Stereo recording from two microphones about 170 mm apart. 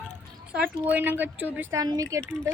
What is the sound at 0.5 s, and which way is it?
Speech, 10° right (ahead or behind).